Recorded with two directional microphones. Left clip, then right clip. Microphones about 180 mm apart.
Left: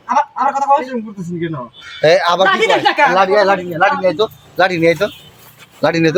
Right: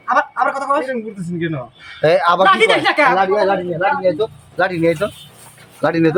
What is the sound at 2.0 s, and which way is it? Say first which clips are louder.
Speech: left 2 dB; 10° right (ahead or behind).